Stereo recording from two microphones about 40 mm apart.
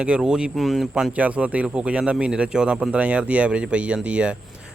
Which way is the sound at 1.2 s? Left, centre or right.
Right.